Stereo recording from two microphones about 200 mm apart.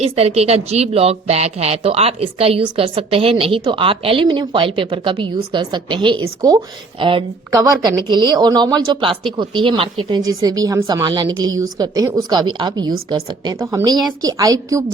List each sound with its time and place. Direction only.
0.0 s speech: 30° right (ahead or behind)